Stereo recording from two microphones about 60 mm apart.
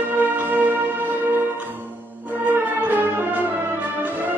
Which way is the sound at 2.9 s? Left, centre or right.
Right.